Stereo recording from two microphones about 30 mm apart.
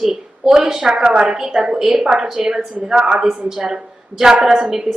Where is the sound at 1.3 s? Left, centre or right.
Centre.